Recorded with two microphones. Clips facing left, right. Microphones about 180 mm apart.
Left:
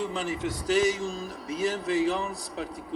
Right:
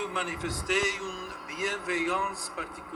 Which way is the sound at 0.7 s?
35° left (ahead or behind).